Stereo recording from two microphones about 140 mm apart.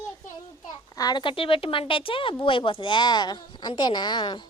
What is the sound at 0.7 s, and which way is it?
A child's voice, 30° left (ahead or behind).